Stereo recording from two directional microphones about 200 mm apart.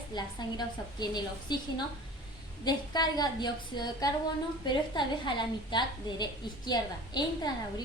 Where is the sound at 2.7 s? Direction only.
20° left (ahead or behind).